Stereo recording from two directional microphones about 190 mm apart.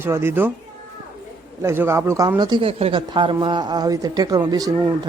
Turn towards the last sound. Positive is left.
turn(degrees=-20)  # may be behind; listen again after turning